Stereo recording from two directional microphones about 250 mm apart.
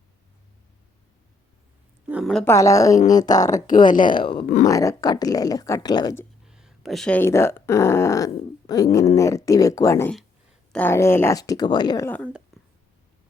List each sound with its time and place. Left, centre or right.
2.0 s speech: centre
3.8 s speech: left
4.1 s speech: centre
4.4 s speech: left
4.6 s speech: centre
6.5 s speech: centre